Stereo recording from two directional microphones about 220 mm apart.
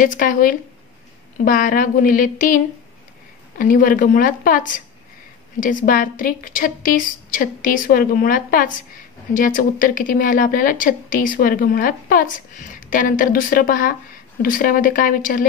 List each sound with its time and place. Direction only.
0.2 s a woman's voice: 40° left (ahead or behind)